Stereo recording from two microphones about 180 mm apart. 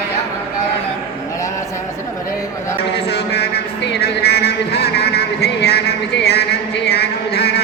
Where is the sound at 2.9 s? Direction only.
65° left (ahead or behind).